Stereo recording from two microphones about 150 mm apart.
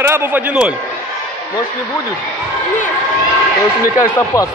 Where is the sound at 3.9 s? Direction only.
20° left (ahead or behind).